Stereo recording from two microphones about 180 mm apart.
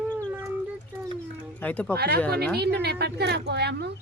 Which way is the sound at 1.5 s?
10° left (ahead or behind).